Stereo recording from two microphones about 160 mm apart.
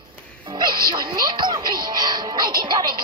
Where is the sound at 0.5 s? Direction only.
30° right (ahead or behind).